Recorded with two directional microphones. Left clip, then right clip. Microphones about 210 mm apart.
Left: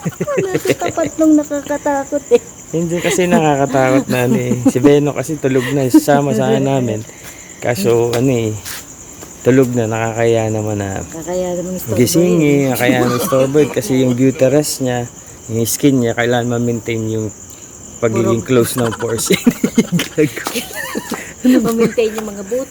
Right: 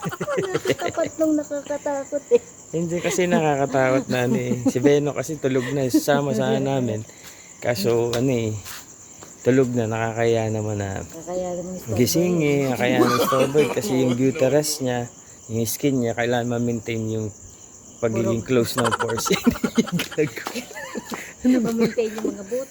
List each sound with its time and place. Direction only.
0.0 s speech: centre (ahead or behind)
1.2 s speech: 10° left (ahead or behind)
2.7 s speech: 10° right (ahead or behind)
5.8 s speech: 10° right (ahead or behind)
11.3 s speech: 20° left (ahead or behind)
11.9 s speech: 10° right (ahead or behind)
15.5 s speech: centre (ahead or behind)
20.5 s speech: 35° left (ahead or behind)
22.0 s speech: 25° left (ahead or behind)